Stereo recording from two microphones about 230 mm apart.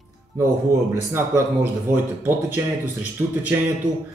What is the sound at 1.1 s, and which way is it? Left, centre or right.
Speech, centre.